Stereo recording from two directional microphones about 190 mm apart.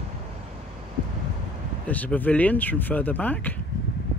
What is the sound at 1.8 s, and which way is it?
Speech, 10° left (ahead or behind).